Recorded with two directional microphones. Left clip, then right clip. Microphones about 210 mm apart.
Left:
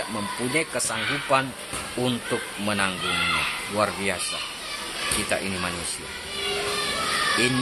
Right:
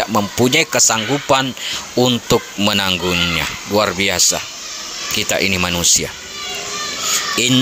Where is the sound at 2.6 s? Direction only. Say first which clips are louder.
Right 9 dB; 40° right (ahead or behind).